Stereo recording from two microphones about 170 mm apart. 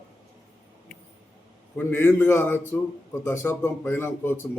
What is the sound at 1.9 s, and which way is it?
A man's voice, 15° left (ahead or behind).